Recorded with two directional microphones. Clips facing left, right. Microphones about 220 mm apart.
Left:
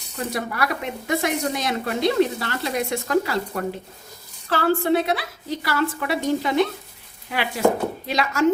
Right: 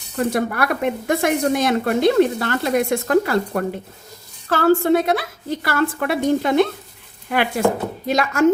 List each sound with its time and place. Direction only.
0.3 s speech: 55° right (ahead or behind)